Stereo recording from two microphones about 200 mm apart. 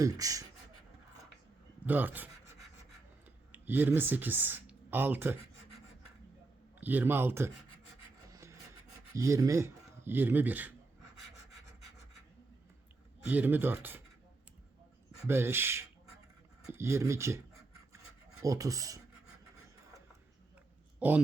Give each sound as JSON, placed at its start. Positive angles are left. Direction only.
{"t": 0.0, "sound": "speech", "side_deg": -15}
{"t": 1.9, "sound": "speech", "side_deg": -10}
{"t": 3.5, "sound": "speech", "side_deg": -10}
{"t": 6.7, "sound": "speech", "side_deg": -10}
{"t": 8.3, "sound": "filing", "side_deg": -15}
{"t": 9.1, "sound": "speech", "side_deg": -15}
{"t": 13.2, "sound": "speech", "side_deg": -10}
{"t": 15.3, "sound": "speech", "side_deg": -10}
{"t": 18.4, "sound": "speech", "side_deg": -15}
{"t": 21.0, "sound": "speech", "side_deg": -5}